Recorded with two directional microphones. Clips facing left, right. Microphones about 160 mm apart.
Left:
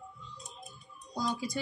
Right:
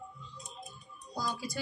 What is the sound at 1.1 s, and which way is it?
Speech, 20° left (ahead or behind).